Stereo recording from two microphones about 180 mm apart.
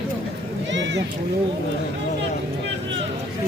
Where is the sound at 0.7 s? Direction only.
90° right.